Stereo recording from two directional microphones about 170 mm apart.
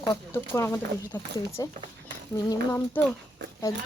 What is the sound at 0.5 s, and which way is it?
Speech, 15° left (ahead or behind).